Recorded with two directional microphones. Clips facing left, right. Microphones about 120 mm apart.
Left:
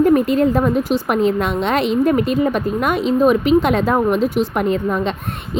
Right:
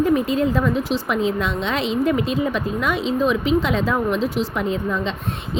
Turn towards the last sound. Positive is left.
turn(degrees=55)  # may be behind; listen again after turning